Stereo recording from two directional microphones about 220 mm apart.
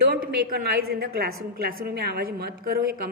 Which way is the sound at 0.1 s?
45° right (ahead or behind).